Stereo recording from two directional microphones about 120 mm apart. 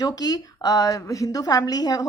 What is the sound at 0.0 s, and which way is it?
A woman's voice, 35° left (ahead or behind).